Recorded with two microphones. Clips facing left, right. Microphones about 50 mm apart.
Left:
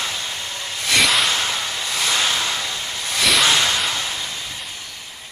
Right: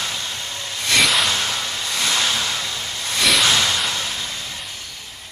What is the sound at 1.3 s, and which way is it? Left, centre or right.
Vehicle, centre.